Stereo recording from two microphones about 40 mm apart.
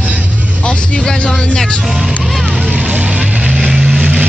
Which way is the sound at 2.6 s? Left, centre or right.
Right.